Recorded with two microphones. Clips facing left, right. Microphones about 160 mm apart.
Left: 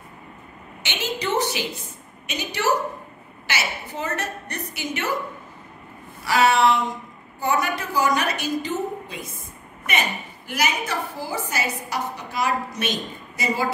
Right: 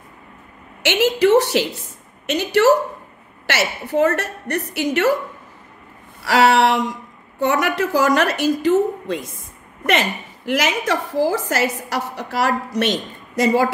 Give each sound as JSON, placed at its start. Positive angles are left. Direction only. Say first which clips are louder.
{"t": 0.8, "sound": "a woman's voice", "louder": "right 12 dB", "side_deg": -85}
{"t": 6.2, "sound": "a woman's voice", "louder": "right 3 dB", "side_deg": -80}
{"t": 9.8, "sound": "a woman's voice", "louder": "right 7 dB", "side_deg": -90}